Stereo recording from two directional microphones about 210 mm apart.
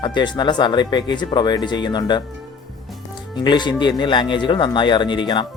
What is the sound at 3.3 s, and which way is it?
Speech, 20° left (ahead or behind).